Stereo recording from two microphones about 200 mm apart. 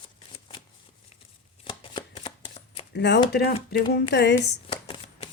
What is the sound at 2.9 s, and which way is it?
Speech, 55° left (ahead or behind).